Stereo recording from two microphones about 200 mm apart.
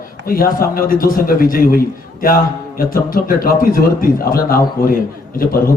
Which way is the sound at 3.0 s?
45° left (ahead or behind).